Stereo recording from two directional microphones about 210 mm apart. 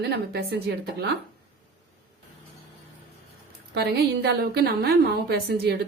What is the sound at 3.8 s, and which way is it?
A woman's voice, 45° right (ahead or behind).